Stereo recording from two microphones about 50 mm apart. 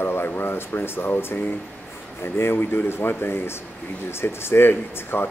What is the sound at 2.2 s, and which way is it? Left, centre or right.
Speech, left.